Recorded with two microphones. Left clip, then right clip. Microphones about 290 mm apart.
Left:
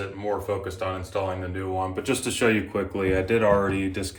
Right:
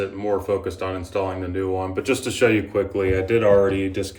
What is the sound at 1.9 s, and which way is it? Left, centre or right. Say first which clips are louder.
Speech: right 4 dB; centre.